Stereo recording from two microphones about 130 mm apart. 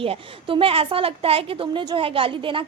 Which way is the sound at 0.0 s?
40° right (ahead or behind).